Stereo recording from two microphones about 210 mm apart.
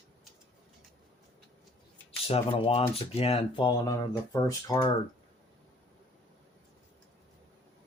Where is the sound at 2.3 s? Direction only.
30° left (ahead or behind).